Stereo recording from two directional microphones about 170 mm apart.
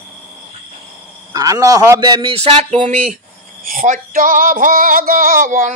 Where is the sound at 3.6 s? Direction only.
55° right (ahead or behind).